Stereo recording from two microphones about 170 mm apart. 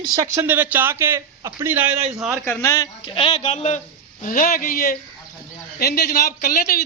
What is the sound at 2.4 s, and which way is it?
Speech, 15° left (ahead or behind).